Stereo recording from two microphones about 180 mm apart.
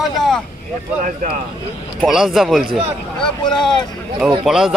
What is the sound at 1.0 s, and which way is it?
Speech, 45° right (ahead or behind).